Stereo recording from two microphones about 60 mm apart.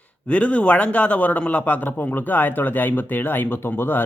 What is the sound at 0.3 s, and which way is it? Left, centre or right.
A man's voice, left.